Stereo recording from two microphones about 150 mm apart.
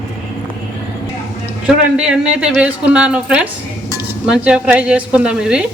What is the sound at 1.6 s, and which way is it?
Speech, 5° right (ahead or behind).